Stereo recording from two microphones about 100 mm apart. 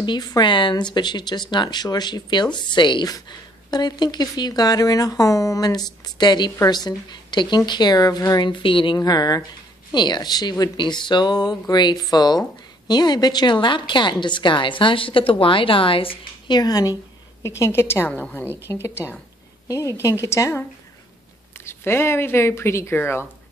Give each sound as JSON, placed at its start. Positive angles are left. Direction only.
{"t": 0.0, "sound": "speech", "side_deg": 45}
{"t": 8.5, "sound": "a woman's voice", "side_deg": 55}
{"t": 8.9, "sound": "a woman's voice", "side_deg": 40}
{"t": 16.5, "sound": "a woman's voice", "side_deg": 40}